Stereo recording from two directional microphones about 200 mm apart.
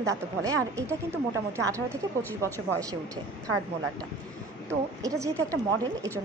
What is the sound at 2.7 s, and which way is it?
Speech, 15° right (ahead or behind).